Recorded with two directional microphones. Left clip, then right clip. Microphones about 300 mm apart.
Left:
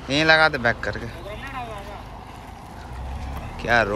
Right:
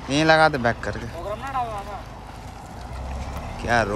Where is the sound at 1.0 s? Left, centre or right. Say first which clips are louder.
Right 4 dB; centre.